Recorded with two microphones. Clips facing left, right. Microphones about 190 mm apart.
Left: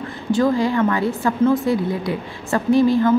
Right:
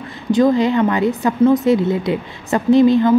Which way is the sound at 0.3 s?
20° right (ahead or behind).